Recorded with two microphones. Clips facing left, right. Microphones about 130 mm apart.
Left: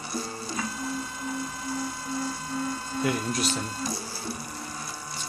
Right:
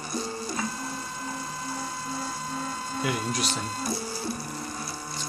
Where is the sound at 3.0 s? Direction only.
5° right (ahead or behind).